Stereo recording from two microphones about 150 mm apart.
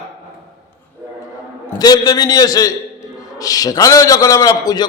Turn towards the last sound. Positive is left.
turn(degrees=25)  # may be behind; listen again after turning